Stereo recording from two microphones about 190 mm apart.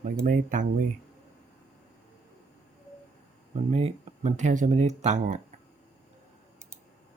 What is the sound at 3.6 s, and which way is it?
Speech, 35° right (ahead or behind).